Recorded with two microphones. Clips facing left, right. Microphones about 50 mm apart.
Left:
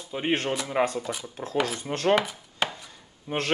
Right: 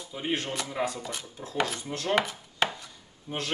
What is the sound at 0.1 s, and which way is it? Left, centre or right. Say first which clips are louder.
Speech: left 5 dB; left.